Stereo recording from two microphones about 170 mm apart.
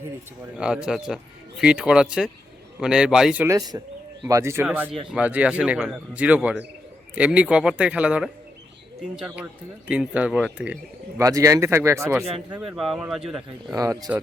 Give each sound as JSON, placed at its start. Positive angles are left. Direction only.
{"t": 0.5, "sound": "speech", "side_deg": -5}
{"t": 3.4, "sound": "a man's voice", "side_deg": -20}
{"t": 11.2, "sound": "a man's voice", "side_deg": -20}
{"t": 12.5, "sound": "speech", "side_deg": -5}
{"t": 13.7, "sound": "speech", "side_deg": -20}